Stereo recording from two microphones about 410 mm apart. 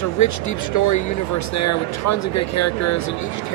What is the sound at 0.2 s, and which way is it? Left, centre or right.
Speech, left.